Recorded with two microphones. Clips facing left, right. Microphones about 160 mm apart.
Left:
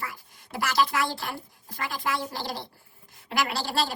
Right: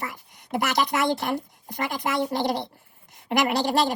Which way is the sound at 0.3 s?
20° right (ahead or behind).